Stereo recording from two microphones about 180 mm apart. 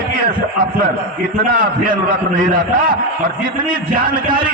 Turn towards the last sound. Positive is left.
turn(degrees=-55)  # may be behind; listen again after turning